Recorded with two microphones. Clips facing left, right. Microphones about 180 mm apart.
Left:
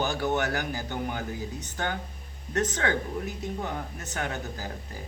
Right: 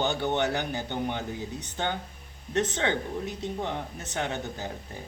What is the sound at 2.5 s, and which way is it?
Speech, 20° right (ahead or behind).